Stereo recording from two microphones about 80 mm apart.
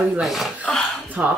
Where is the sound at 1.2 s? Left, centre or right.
Centre.